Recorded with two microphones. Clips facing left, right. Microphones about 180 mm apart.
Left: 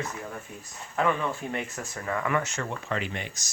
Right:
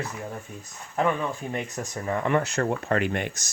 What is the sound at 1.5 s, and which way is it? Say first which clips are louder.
Speech: right 2 dB; 15° right (ahead or behind).